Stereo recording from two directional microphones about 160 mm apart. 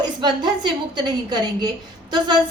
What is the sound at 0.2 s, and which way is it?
A woman's voice, 30° right (ahead or behind).